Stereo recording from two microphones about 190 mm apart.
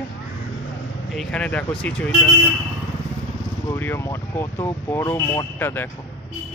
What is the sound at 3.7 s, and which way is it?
Speech, 15° left (ahead or behind).